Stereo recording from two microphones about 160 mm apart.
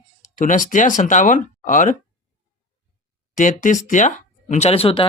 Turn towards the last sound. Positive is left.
turn(degrees=35)  # may be behind; listen again after turning